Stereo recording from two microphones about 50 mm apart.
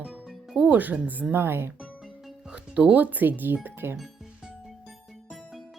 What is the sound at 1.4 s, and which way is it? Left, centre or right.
Speech, right.